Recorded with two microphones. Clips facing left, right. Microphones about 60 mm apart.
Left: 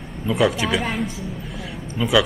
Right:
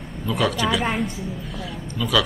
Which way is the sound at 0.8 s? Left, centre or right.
Centre.